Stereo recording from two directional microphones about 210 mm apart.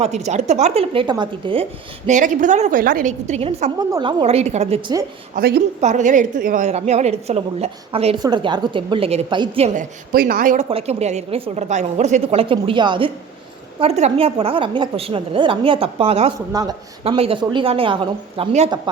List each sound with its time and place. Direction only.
0.0 s a woman's voice: 30° right (ahead or behind)
2.0 s a woman's voice: 35° right (ahead or behind)
3.8 s a woman's voice: 20° right (ahead or behind)
5.3 s a woman's voice: 45° right (ahead or behind)
10.1 s a woman's voice: 45° right (ahead or behind); by 16.3 s 30° right (ahead or behind)
16.5 s a woman's voice: 20° right (ahead or behind)